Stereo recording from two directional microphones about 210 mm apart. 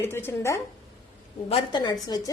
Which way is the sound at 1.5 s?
25° left (ahead or behind).